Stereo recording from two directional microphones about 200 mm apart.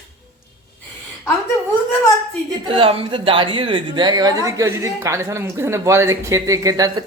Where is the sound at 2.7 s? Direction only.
25° right (ahead or behind).